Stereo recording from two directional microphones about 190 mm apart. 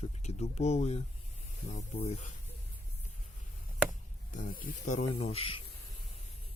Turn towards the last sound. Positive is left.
turn(degrees=30)  # may be behind; listen again after turning